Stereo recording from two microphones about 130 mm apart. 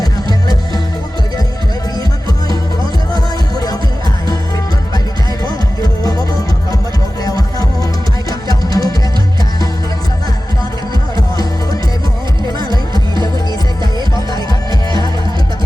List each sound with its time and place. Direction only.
0.0 s music: 30° left (ahead or behind)
7.3 s music: 30° left (ahead or behind)